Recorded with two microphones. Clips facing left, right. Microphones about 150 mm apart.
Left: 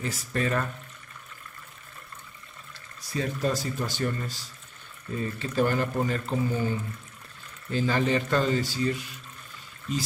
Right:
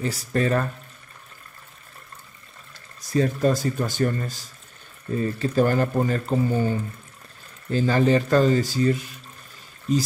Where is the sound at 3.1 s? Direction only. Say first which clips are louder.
Right 7 dB; 45° right (ahead or behind).